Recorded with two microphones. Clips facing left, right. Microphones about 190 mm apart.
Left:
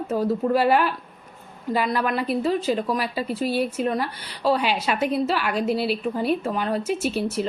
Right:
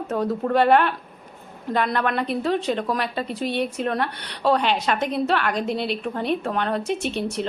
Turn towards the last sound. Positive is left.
turn(degrees=5)  # may be behind; listen again after turning